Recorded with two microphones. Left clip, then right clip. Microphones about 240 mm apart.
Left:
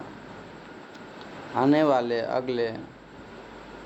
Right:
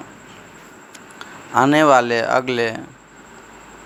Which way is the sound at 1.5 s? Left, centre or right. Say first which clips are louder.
Right 9 dB; right.